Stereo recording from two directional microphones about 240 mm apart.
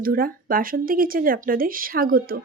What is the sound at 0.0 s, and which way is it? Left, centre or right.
Speech, right.